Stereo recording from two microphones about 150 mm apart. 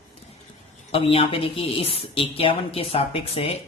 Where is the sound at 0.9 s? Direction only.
40° left (ahead or behind).